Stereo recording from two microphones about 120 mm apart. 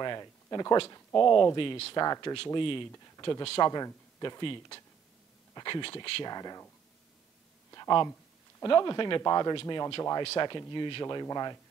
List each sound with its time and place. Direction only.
0.0 s speech: 35° left (ahead or behind)
2.0 s speech: 30° left (ahead or behind)
2.3 s a man's voice: 45° left (ahead or behind)
4.4 s speech: 45° left (ahead or behind)
6.2 s speech: 35° left (ahead or behind)
7.7 s a sound: 35° left (ahead or behind)
8.6 s speech: 40° left (ahead or behind)
9.2 s speech: 30° left (ahead or behind)
9.6 s speech: 40° left (ahead or behind)